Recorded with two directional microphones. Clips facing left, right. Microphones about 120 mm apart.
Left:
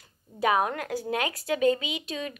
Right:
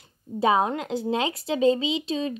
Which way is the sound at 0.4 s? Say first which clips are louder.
Right 3 dB; 25° right (ahead or behind).